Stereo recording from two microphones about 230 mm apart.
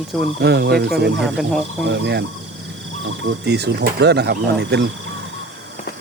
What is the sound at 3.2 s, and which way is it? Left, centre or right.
Speech, right.